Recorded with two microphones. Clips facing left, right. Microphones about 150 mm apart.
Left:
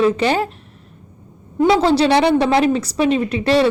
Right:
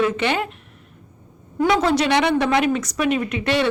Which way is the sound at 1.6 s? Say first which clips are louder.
Left 4 dB; 30° left (ahead or behind).